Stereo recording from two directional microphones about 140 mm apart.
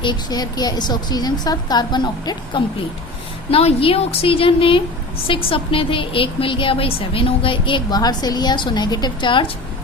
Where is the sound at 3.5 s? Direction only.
40° left (ahead or behind).